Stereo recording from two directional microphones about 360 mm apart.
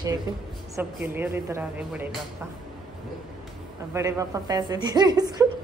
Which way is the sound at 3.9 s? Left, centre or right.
Centre.